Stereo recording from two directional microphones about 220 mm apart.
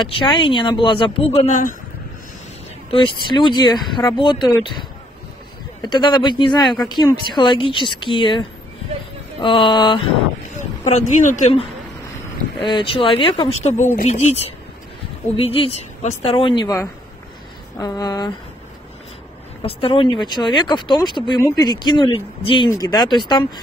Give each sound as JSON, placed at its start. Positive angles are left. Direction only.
{"t": 0.0, "sound": "speech", "side_deg": 20}
{"t": 2.9, "sound": "speech", "side_deg": 20}
{"t": 5.8, "sound": "speech", "side_deg": 20}
{"t": 10.9, "sound": "speech", "side_deg": 30}
{"t": 12.6, "sound": "speech", "side_deg": 25}
{"t": 15.3, "sound": "speech", "side_deg": 25}
{"t": 17.7, "sound": "speech", "side_deg": 15}
{"t": 19.6, "sound": "speech", "side_deg": 25}